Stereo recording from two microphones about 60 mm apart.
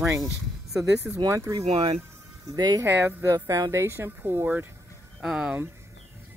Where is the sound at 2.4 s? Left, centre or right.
Right.